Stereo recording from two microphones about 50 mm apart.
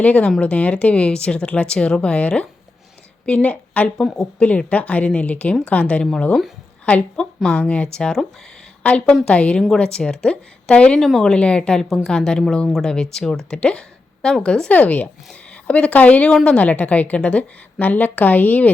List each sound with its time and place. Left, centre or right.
0.0 s speech: left
0.3 s speech: centre
0.5 s a woman's voice: left
1.6 s a woman's voice: centre
3.9 s speech: centre
4.4 s a woman's voice: left
7.4 s a woman's voice: left
7.9 s speech: centre
8.8 s a woman's voice: left
11.0 s speech: centre
11.3 s a woman's voice: left
14.7 s a woman's voice: left
16.3 s a woman's voice: centre; by 18.7 s left